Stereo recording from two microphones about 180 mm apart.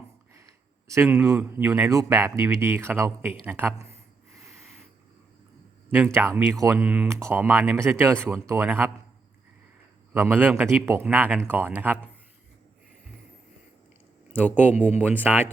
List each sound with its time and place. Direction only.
0.9 s speech: 15° right (ahead or behind)
5.9 s speech: 10° right (ahead or behind)
10.2 s speech: 10° right (ahead or behind)
14.3 s speech: 10° right (ahead or behind)